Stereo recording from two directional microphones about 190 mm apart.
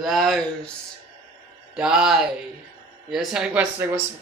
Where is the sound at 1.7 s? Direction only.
5° right (ahead or behind).